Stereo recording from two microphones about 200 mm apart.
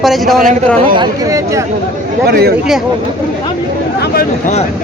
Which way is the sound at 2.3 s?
50° right (ahead or behind).